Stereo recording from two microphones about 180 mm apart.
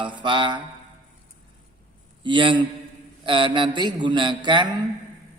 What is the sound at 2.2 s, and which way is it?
A man's voice, 25° right (ahead or behind).